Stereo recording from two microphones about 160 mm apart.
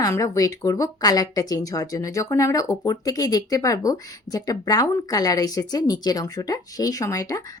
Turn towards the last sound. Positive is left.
turn(degrees=20)  # may be behind; listen again after turning